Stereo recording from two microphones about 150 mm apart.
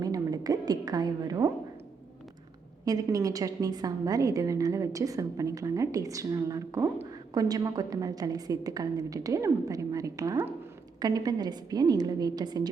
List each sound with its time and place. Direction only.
0.0 s a woman's voice: 25° right (ahead or behind)
2.8 s a woman's voice: 25° right (ahead or behind)